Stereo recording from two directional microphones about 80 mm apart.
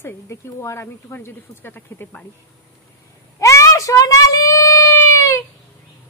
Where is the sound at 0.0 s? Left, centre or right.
Left.